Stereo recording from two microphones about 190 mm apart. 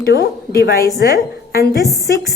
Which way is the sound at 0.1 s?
55° left (ahead or behind).